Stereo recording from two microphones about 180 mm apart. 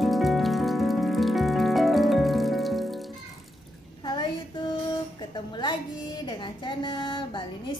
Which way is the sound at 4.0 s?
25° left (ahead or behind).